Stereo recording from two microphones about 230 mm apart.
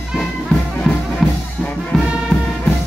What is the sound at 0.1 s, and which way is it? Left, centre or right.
Music, centre.